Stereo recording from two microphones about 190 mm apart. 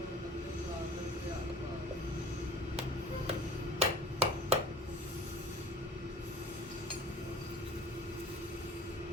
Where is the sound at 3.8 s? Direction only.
30° right (ahead or behind).